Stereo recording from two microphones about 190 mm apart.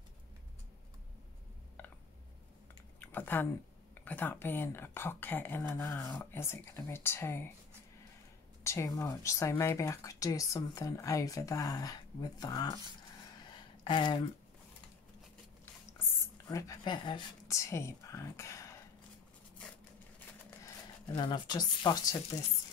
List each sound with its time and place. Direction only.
3.1 s speech: 10° left (ahead or behind)
8.6 s speech: 15° left (ahead or behind)
13.8 s speech: 25° left (ahead or behind)
16.4 s speech: 15° left (ahead or behind)
20.6 s speech: 25° left (ahead or behind)